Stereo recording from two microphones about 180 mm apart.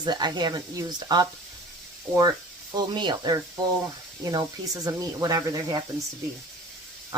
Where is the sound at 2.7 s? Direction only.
25° right (ahead or behind).